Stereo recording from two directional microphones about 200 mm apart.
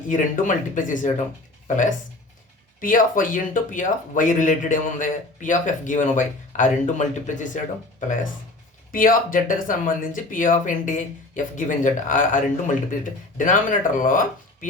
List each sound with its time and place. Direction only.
0.1 s speech: 40° left (ahead or behind)